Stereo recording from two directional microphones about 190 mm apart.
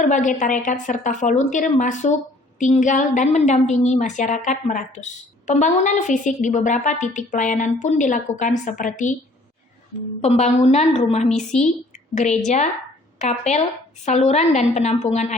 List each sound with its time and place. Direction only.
0.0 s a woman's voice: 40° left (ahead or behind)
10.2 s a woman's voice: 35° left (ahead or behind)
13.1 s a woman's voice: 40° left (ahead or behind)